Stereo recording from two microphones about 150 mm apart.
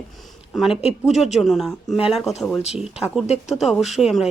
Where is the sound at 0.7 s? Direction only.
40° left (ahead or behind).